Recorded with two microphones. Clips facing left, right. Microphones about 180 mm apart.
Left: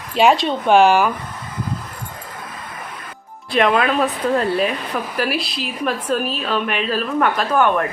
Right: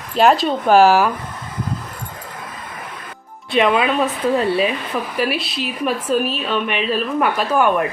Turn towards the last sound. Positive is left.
turn(degrees=-10)  # may be behind; listen again after turning